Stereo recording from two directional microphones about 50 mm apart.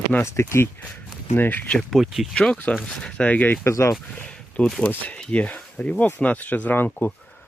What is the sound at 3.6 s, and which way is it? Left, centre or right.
Speech, left.